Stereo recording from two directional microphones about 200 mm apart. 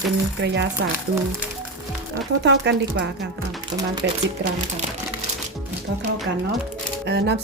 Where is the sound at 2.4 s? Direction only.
60° right (ahead or behind).